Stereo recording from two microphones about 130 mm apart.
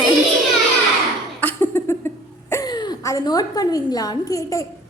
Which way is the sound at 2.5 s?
30° left (ahead or behind).